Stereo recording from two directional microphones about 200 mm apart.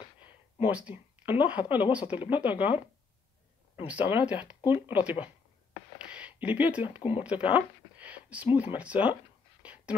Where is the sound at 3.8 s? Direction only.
10° right (ahead or behind).